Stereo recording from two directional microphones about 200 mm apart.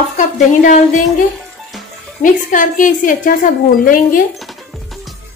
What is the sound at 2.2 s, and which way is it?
Speech, 40° left (ahead or behind).